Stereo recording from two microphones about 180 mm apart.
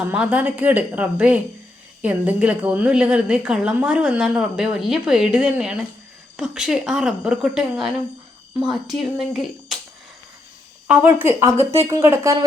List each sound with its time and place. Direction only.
0.0 s a woman's voice: 10° right (ahead or behind)
10.8 s a woman's voice: 10° right (ahead or behind)
11.5 s speech: 35° right (ahead or behind)
11.9 s a woman's voice: 15° right (ahead or behind)